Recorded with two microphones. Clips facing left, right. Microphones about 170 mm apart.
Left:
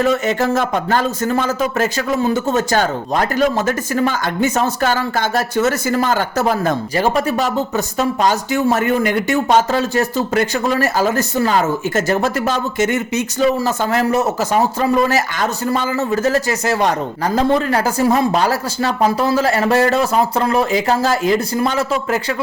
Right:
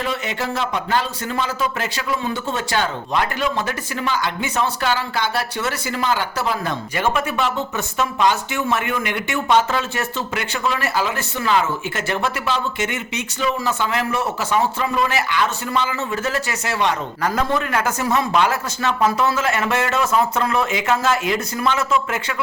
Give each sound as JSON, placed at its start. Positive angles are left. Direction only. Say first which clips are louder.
{"t": 0.0, "sound": "a man's voice", "louder": "left 9 dB", "side_deg": 45}